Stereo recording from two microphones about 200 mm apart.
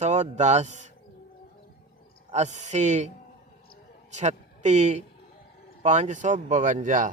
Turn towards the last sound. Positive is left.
turn(degrees=-40)  # may be behind; listen again after turning